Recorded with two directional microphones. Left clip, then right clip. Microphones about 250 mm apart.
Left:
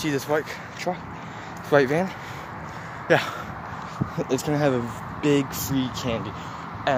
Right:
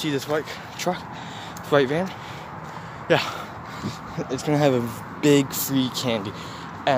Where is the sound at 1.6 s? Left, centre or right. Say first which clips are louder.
Left 1 dB; centre.